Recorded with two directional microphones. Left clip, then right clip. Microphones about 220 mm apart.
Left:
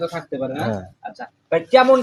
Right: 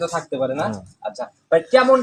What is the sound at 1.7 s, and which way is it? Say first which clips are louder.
Speech: left 2 dB; 20° left (ahead or behind).